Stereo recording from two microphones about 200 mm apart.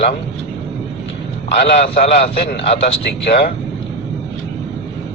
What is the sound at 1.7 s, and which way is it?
A man's voice, 35° left (ahead or behind).